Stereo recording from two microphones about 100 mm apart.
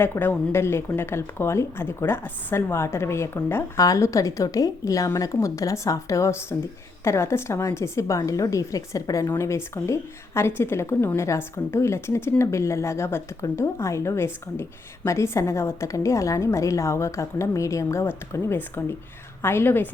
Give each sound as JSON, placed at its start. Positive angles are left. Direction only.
{"t": 0.0, "sound": "a woman's voice", "side_deg": 20}